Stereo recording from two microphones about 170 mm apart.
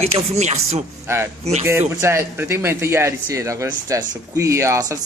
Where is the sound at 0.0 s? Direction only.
40° right (ahead or behind).